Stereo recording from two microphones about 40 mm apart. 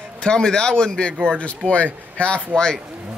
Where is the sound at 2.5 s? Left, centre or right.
Centre.